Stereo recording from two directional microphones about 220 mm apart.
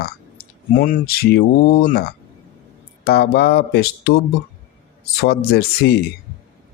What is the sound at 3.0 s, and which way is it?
Speech, 45° left (ahead or behind).